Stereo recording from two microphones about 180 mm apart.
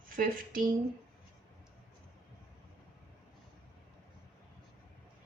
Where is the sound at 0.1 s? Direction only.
50° right (ahead or behind).